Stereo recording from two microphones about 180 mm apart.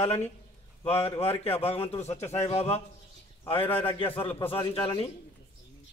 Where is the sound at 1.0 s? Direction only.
35° left (ahead or behind).